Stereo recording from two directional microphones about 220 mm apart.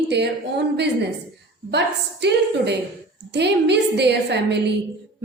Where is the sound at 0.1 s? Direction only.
50° right (ahead or behind).